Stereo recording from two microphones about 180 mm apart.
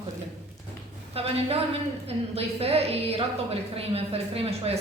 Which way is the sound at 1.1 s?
35° right (ahead or behind).